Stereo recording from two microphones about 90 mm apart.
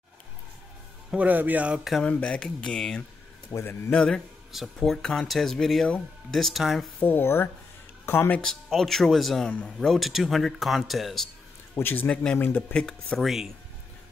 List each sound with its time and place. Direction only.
1.1 s speech: 20° right (ahead or behind)
2.0 s speech: 15° left (ahead or behind)
3.5 s a man's voice: 50° left (ahead or behind)
3.9 s speech: 10° left (ahead or behind)
4.5 s speech: centre (ahead or behind)
7.0 s a man's voice: 25° left (ahead or behind)
8.0 s music: 25° left (ahead or behind)
8.6 s speech: centre (ahead or behind)
9.5 s speech: 15° left (ahead or behind)
9.8 s speech: centre (ahead or behind)
11.7 s a man's voice: 20° left (ahead or behind)
12.4 s a man's voice: 25° left (ahead or behind)
12.7 s speech: 5° left (ahead or behind)